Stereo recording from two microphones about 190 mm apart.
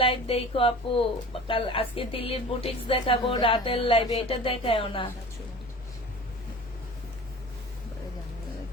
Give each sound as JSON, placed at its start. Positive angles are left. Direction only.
{"t": 0.0, "sound": "speech", "side_deg": 30}